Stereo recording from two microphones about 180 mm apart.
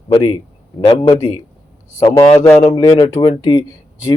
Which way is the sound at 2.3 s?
20° left (ahead or behind).